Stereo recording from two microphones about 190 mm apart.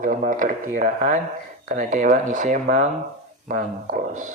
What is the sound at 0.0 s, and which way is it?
A woman's voice, 45° right (ahead or behind).